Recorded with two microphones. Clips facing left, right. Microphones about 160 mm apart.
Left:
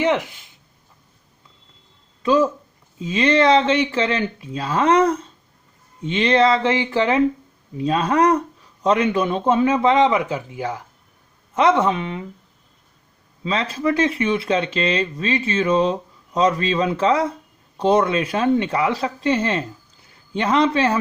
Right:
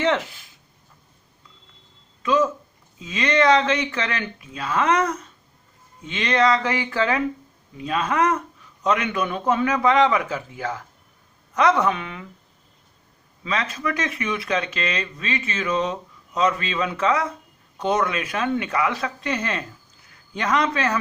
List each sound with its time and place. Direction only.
0.0 s a sound: 15° left (ahead or behind)
2.2 s speech: 30° left (ahead or behind)
7.8 s speech: 35° left (ahead or behind)
13.4 s speech: 30° left (ahead or behind)